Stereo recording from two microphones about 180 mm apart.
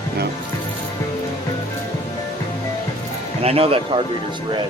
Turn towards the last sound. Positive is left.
turn(degrees=-30)  # may be behind; listen again after turning